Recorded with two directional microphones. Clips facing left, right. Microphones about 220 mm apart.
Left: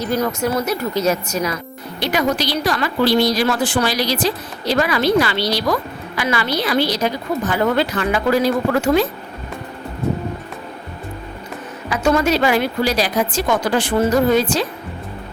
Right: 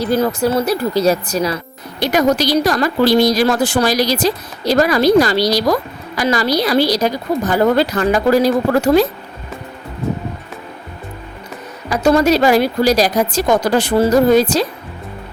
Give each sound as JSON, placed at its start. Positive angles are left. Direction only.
{"t": 0.0, "sound": "a woman's voice", "side_deg": -35}
{"t": 11.9, "sound": "a woman's voice", "side_deg": -35}